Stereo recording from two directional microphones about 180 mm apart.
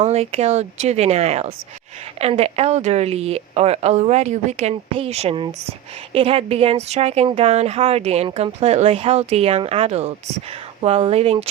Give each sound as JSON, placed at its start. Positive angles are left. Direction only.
{"t": 0.0, "sound": "a woman's voice", "side_deg": -35}